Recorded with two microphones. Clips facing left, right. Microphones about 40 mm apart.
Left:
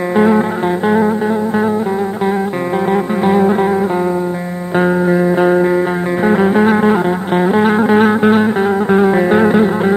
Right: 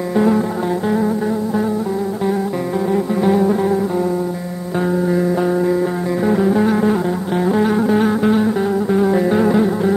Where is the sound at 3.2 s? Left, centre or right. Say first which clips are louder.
Left 3 dB; left.